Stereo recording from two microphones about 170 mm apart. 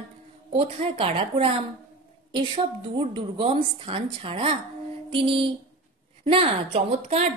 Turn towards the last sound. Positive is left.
turn(degrees=-35)  # may be behind; listen again after turning